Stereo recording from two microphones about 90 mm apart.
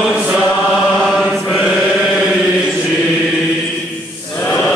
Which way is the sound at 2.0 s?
5° right (ahead or behind).